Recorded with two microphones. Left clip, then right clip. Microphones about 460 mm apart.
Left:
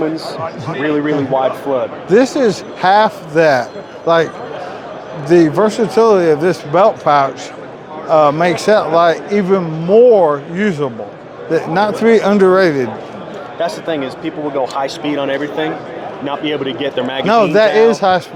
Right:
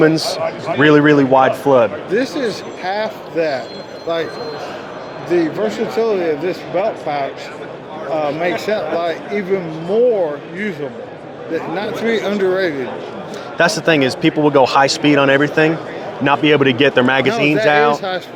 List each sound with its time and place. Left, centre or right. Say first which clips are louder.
0.8 s speech: right 6 dB; right
2.0 s speech: left 7 dB; left
5.3 s speech: left 6 dB; left
13.6 s a man's voice: right 5 dB; right
17.3 s speech: left 3 dB; left